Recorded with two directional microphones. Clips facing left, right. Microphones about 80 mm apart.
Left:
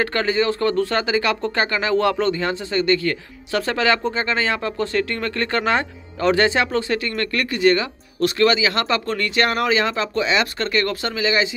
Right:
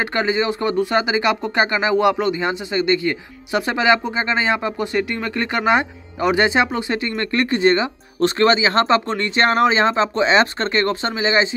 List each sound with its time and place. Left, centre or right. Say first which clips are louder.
0.0 s speech: even; centre